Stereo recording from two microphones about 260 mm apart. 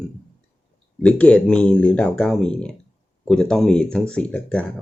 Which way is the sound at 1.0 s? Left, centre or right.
Centre.